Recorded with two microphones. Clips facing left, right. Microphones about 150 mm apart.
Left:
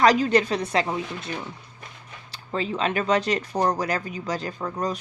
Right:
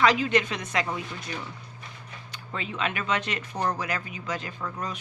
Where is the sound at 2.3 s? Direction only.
30° left (ahead or behind).